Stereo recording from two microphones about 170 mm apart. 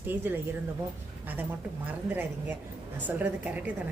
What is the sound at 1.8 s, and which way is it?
A woman's voice, 10° right (ahead or behind).